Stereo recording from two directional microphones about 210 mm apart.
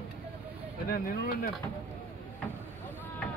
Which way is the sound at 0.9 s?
45° left (ahead or behind).